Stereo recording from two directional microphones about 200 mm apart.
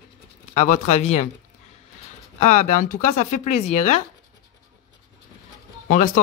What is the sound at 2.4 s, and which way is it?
Speech, 35° left (ahead or behind).